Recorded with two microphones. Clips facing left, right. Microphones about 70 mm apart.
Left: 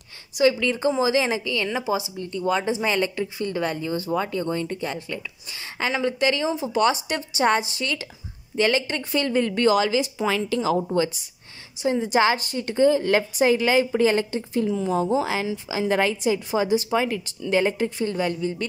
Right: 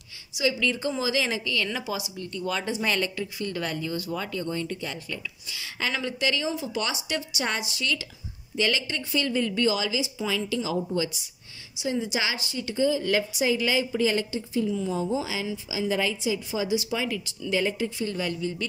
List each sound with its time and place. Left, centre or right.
0.4 s a woman's voice: left